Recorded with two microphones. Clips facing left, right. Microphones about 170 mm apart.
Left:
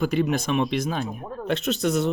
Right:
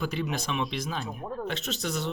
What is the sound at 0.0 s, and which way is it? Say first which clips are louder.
Speech: left 8 dB; 50° left (ahead or behind).